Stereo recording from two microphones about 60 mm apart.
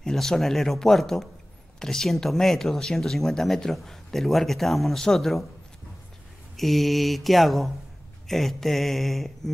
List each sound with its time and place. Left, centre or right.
0.0 s speech: centre
6.5 s speech: centre